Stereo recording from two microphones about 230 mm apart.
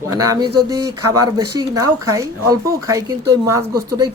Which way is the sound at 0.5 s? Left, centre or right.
Right.